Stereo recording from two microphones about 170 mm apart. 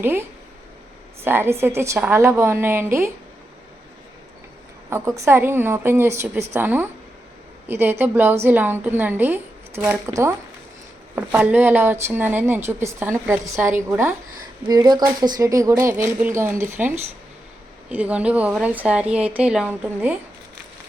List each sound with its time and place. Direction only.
0.0 s a woman's voice: 15° right (ahead or behind)
4.9 s a woman's voice: 15° right (ahead or behind)
13.6 s a woman's voice: 50° right (ahead or behind)
13.9 s a woman's voice: 15° right (ahead or behind)
14.7 s a woman's voice: 25° right (ahead or behind)
17.9 s a woman's voice: 5° right (ahead or behind)